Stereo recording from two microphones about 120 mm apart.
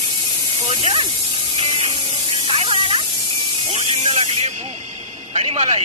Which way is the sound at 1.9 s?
45° right (ahead or behind).